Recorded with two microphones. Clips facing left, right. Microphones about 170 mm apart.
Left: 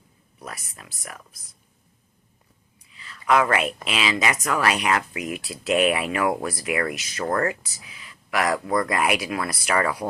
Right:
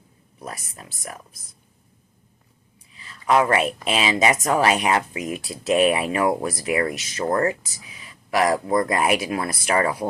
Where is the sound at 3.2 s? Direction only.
30° right (ahead or behind).